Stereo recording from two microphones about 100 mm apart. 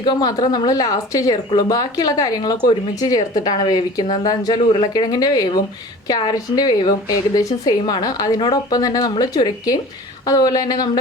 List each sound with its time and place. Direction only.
0.0 s speech: 45° left (ahead or behind)